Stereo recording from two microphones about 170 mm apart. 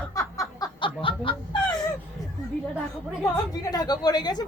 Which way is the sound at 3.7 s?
25° left (ahead or behind).